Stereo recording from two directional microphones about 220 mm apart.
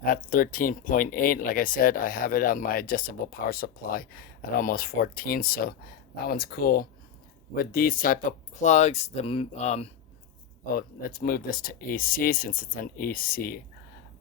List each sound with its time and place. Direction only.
0.0 s speech: 40° left (ahead or behind)
10.8 s speech: 40° left (ahead or behind)